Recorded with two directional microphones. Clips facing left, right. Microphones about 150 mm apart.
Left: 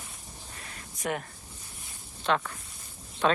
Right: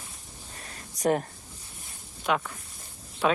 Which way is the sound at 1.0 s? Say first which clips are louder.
Right 8 dB; 35° right (ahead or behind).